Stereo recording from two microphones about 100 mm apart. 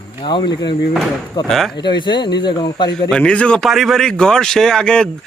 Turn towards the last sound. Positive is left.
turn(degrees=10)  # may be behind; listen again after turning